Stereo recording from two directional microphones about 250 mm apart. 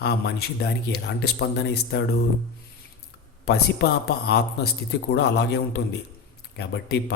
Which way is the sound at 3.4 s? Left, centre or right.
Left.